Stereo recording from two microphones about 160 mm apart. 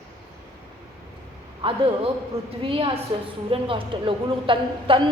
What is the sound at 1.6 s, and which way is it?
A woman's voice, 30° right (ahead or behind).